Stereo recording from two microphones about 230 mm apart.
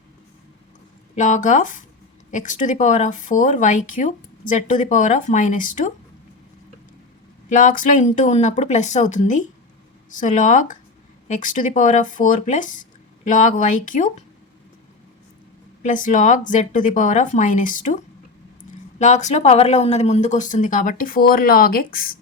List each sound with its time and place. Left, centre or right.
1.1 s speech: left
7.5 s speech: left
15.8 s speech: left
18.9 s speech: left